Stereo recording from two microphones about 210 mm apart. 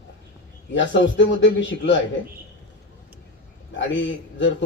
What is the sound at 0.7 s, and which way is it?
A man's voice, 60° left (ahead or behind).